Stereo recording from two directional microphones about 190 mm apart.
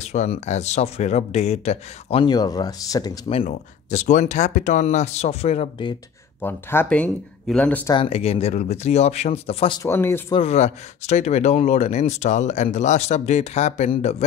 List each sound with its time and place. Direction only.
0.0 s speech: 35° left (ahead or behind)
3.4 s speech: 40° left (ahead or behind)
6.4 s speech: 10° left (ahead or behind)
7.9 s speech: 30° left (ahead or behind)
9.8 s speech: 15° left (ahead or behind)
10.3 s speech: 35° left (ahead or behind)